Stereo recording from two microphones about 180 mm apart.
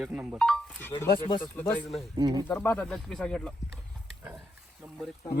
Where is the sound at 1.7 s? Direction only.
25° left (ahead or behind).